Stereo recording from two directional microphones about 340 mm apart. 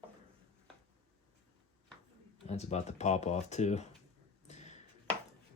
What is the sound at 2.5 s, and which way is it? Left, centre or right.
Speech, centre.